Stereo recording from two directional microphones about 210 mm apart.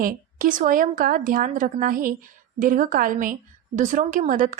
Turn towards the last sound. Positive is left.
turn(degrees=-35)  # may be behind; listen again after turning